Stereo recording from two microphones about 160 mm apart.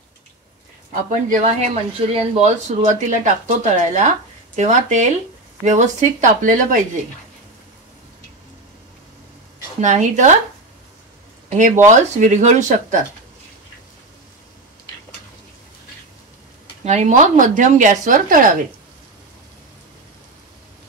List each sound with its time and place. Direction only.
1.3 s speech: 45° right (ahead or behind)
9.8 s speech: 50° right (ahead or behind)
11.4 s speech: 50° right (ahead or behind)
16.8 s speech: 45° right (ahead or behind)